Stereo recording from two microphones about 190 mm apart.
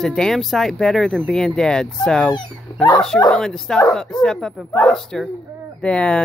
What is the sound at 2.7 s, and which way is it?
Dog, 25° left (ahead or behind).